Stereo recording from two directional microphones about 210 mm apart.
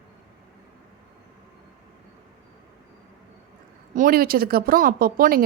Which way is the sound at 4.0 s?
45° right (ahead or behind).